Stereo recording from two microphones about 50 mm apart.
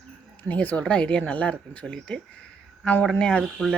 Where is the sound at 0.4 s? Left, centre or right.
Left.